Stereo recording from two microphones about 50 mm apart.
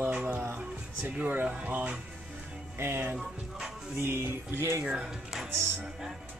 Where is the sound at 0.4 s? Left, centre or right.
Right.